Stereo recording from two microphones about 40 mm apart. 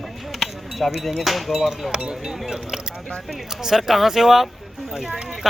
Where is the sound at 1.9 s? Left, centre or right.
Right.